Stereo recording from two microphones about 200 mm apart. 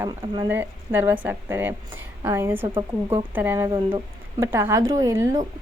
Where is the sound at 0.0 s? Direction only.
10° right (ahead or behind).